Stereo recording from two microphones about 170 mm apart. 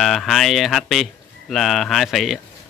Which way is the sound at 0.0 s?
Centre (ahead or behind).